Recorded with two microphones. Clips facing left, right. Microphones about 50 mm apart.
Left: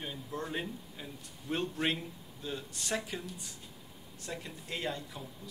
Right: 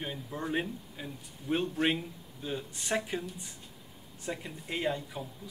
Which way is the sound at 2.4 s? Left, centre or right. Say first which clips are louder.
Right 3 dB; right.